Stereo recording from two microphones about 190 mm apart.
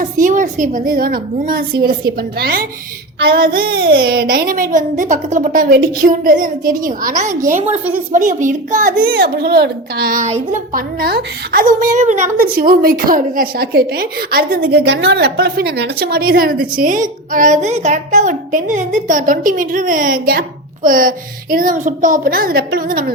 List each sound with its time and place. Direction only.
0.0 s speech: 40° right (ahead or behind)